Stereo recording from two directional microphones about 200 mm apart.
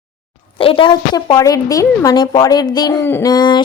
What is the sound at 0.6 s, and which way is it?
A woman's voice, 25° left (ahead or behind).